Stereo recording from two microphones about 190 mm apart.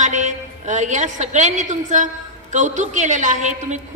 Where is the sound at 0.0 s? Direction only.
40° right (ahead or behind).